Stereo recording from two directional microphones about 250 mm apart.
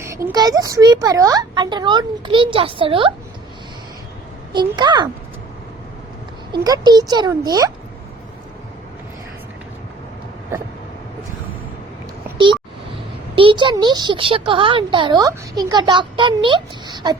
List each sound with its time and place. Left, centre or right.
0.0 s a sound: centre
0.3 s a child's voice: centre
4.8 s a child's voice: centre
6.5 s a child's voice: centre
13.3 s a woman's voice: right